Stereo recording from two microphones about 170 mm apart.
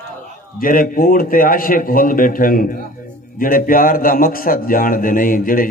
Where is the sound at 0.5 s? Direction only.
55° left (ahead or behind).